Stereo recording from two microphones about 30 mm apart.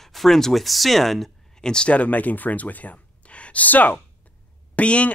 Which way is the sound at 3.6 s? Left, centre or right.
Left.